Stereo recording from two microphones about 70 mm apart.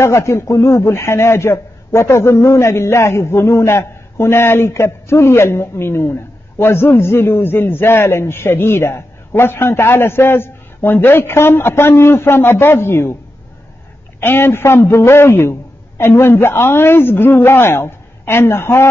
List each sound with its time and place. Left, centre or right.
0.0 s a man's voice: left
14.2 s a man's voice: left